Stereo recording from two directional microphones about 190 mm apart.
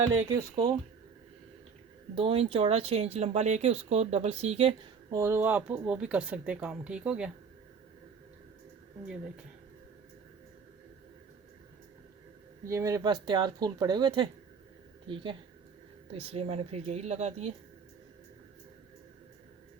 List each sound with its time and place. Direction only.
0.3 s speech: 20° right (ahead or behind)
2.1 s speech: 30° right (ahead or behind)
5.1 s speech: 15° right (ahead or behind)
12.6 s speech: 15° right (ahead or behind); by 17.5 s 35° right (ahead or behind)